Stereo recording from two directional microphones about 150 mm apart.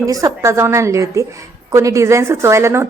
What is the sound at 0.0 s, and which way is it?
A woman's voice, 20° right (ahead or behind).